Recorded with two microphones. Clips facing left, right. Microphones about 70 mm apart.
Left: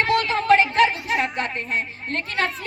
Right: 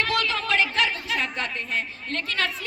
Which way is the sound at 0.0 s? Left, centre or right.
Left.